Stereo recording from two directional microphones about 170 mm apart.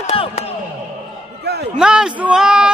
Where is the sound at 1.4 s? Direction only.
75° right (ahead or behind).